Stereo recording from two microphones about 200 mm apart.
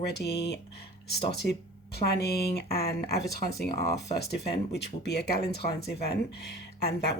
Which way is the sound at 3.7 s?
15° left (ahead or behind).